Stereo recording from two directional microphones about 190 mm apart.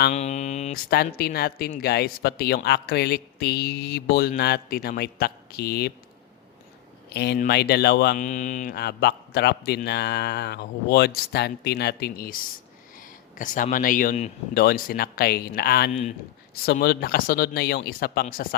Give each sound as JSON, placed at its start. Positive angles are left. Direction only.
{"t": 0.1, "sound": "speech", "side_deg": 35}
{"t": 0.9, "sound": "speech", "side_deg": 55}
{"t": 7.1, "sound": "speech", "side_deg": 60}
{"t": 8.2, "sound": "speech", "side_deg": 40}
{"t": 8.7, "sound": "speech", "side_deg": 60}
{"t": 15.9, "sound": "speech", "side_deg": 35}
{"t": 16.6, "sound": "speech", "side_deg": 55}